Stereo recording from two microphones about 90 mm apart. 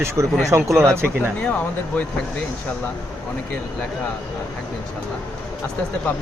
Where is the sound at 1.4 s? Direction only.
15° left (ahead or behind).